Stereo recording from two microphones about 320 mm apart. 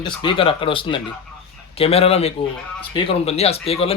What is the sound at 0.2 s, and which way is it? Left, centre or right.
A man's voice, centre.